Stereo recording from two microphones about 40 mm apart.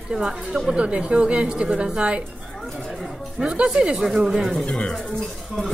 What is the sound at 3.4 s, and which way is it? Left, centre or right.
Speech, right.